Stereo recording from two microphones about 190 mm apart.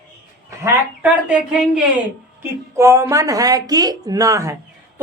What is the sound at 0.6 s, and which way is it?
A woman's voice, 10° right (ahead or behind).